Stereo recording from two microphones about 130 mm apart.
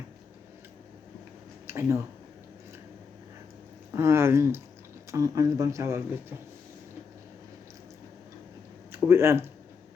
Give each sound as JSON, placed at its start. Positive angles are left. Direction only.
{"t": 1.6, "sound": "a sound", "side_deg": -20}
{"t": 3.9, "sound": "speech", "side_deg": -20}
{"t": 8.9, "sound": "speech", "side_deg": -20}